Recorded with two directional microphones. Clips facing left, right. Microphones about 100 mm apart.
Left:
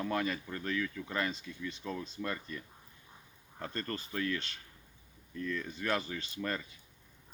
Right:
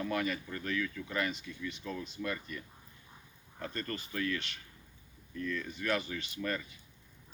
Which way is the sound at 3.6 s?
30° left (ahead or behind).